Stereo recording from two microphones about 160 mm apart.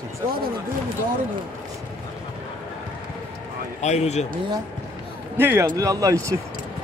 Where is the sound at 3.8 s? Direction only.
45° left (ahead or behind).